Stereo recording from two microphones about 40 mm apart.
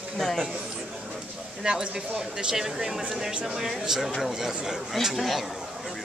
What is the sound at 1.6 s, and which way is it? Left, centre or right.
Speech, right.